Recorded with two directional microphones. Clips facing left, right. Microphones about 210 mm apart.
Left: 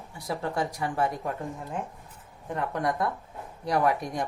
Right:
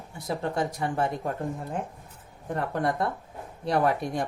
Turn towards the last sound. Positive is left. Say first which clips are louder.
# right 1 dB
turn(degrees=-30)  # may be behind; listen again after turning